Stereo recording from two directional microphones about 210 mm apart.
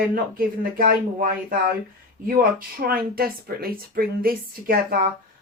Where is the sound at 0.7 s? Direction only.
45° right (ahead or behind).